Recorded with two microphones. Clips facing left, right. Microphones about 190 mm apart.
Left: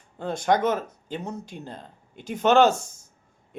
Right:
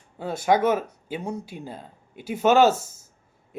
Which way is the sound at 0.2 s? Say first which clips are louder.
Right 1 dB; 5° right (ahead or behind).